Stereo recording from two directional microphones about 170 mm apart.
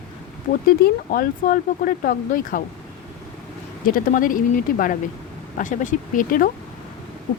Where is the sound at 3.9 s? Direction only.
55° left (ahead or behind).